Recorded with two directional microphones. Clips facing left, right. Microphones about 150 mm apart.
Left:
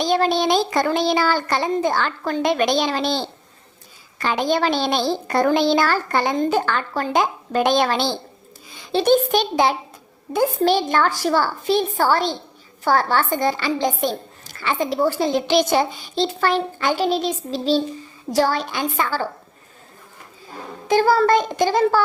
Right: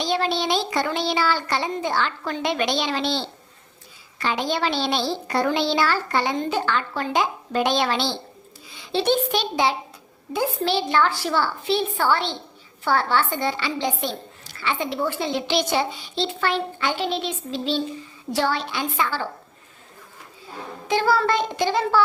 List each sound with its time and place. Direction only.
0.0 s a woman's voice: 45° left (ahead or behind)
20.8 s a woman's voice: 45° left (ahead or behind)